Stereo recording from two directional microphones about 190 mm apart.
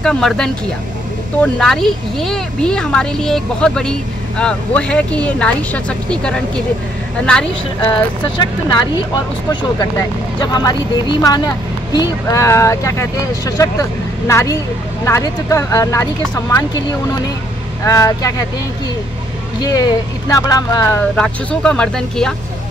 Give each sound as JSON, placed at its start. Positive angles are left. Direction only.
{"t": 0.0, "sound": "speech", "side_deg": 0}
{"t": 7.8, "sound": "speech", "side_deg": 25}
{"t": 17.8, "sound": "speech", "side_deg": 15}
{"t": 19.6, "sound": "speech", "side_deg": 20}
{"t": 21.2, "sound": "speech", "side_deg": 5}